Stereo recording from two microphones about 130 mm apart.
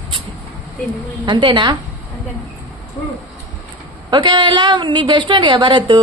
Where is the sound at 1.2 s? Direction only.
35° right (ahead or behind).